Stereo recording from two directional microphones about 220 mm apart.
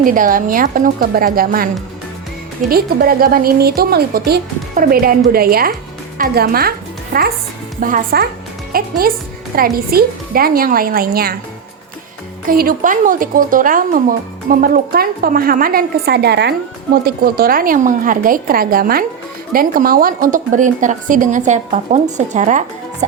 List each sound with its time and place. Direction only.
0.0 s a woman's voice: 40° right (ahead or behind)
12.5 s a woman's voice: 40° right (ahead or behind)